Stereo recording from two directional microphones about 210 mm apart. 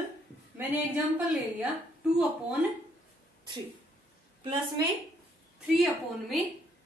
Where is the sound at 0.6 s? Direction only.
10° right (ahead or behind).